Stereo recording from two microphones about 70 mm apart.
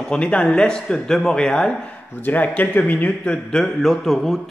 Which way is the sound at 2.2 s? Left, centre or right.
Left.